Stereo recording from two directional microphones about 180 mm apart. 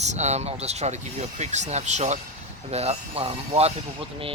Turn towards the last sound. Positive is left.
turn(degrees=-35)  # may be behind; listen again after turning